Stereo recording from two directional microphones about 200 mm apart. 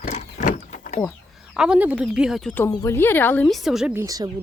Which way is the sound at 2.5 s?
15° left (ahead or behind).